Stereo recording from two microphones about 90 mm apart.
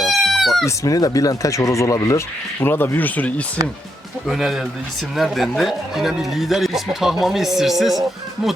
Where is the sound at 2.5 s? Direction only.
25° left (ahead or behind).